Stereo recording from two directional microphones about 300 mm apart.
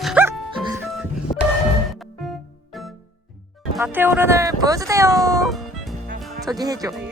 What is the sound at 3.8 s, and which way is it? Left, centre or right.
Speech, centre.